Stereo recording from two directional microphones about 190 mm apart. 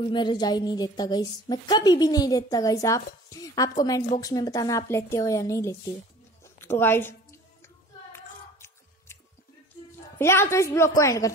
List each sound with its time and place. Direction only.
0.0 s a woman's voice: 25° left (ahead or behind)
6.4 s a sound: 10° left (ahead or behind)
10.1 s a woman's voice: 10° left (ahead or behind)